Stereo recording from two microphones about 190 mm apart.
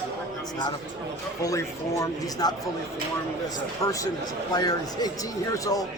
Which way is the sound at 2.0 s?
20° left (ahead or behind).